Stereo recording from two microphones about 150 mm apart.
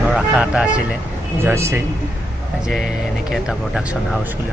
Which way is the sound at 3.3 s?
5° right (ahead or behind).